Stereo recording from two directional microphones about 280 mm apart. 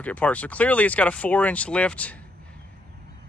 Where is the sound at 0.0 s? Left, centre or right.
Centre.